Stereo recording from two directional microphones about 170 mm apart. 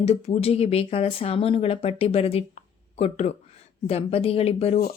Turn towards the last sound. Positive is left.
turn(degrees=35)  # may be behind; listen again after turning